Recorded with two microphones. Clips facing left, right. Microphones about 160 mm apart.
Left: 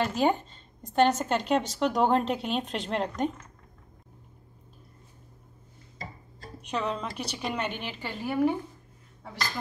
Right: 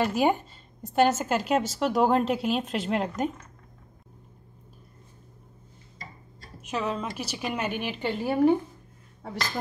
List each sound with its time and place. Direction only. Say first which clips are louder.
0.0 s a woman's voice: right 2 dB; 15° right (ahead or behind)
6.6 s a woman's voice: right 1 dB; 5° right (ahead or behind)
8.0 s a woman's voice: right 5 dB; 25° right (ahead or behind)